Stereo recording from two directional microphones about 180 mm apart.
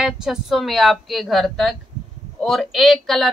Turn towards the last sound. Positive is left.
turn(degrees=0)  # may be behind; listen again after turning